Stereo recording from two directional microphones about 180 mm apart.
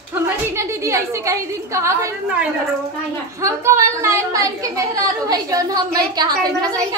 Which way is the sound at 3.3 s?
15° right (ahead or behind).